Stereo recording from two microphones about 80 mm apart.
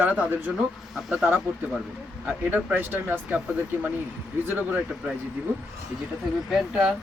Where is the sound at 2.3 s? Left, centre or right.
Right.